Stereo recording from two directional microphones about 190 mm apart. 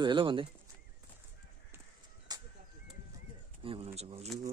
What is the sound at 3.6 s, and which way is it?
Speech, 30° right (ahead or behind).